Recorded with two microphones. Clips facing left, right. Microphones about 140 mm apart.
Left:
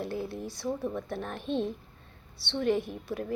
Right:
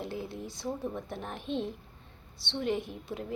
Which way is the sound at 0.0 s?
20° right (ahead or behind).